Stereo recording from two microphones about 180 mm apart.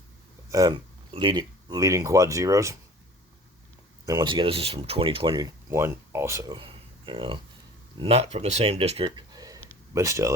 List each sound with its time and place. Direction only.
0.5 s speech: 20° right (ahead or behind)
4.0 s speech: 20° right (ahead or behind)